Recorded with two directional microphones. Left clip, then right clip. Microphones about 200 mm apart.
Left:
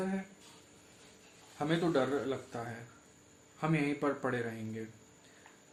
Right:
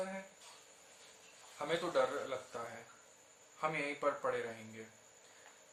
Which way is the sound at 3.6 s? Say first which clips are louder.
Left 3 dB; 45° left (ahead or behind).